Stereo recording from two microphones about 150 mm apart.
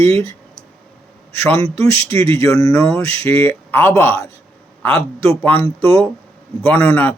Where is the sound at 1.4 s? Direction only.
15° left (ahead or behind).